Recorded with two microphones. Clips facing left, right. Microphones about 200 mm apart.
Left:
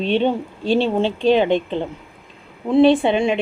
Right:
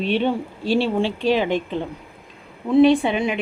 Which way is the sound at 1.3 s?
25° left (ahead or behind).